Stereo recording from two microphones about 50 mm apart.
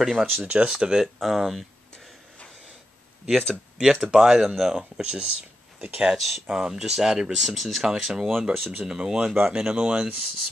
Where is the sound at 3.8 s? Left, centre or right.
Centre.